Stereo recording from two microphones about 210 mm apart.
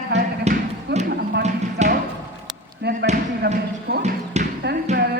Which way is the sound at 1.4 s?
35° right (ahead or behind).